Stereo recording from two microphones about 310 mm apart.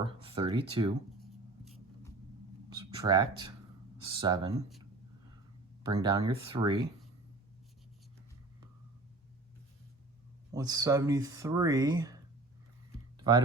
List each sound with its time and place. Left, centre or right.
0.0 s speech: centre
1.2 s writing: centre
2.6 s speech: centre
5.8 s speech: centre
10.5 s speech: centre
13.1 s typing: centre